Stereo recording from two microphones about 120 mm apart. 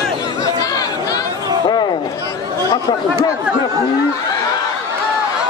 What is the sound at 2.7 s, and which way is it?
Speech, 35° left (ahead or behind).